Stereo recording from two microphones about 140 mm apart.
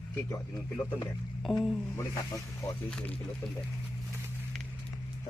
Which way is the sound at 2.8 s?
10° left (ahead or behind).